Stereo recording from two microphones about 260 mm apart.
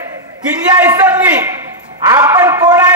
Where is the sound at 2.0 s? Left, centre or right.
Centre.